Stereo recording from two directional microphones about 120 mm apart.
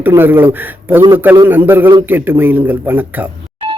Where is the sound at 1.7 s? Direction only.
20° right (ahead or behind).